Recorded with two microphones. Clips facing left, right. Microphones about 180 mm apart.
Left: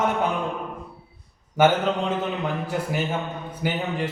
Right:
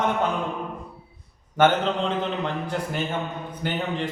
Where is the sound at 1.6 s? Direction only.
10° left (ahead or behind).